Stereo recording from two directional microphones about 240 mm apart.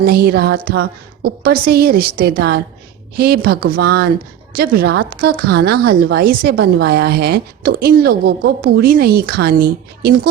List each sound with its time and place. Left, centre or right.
0.0 s a woman's voice: right
5.0 s a sound: right
5.5 s a woman's voice: right